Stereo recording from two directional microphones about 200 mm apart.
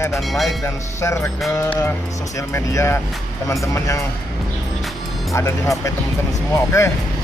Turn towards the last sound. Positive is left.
turn(degrees=15)  # may be behind; listen again after turning